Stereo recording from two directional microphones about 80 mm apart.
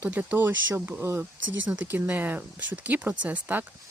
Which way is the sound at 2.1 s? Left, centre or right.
Right.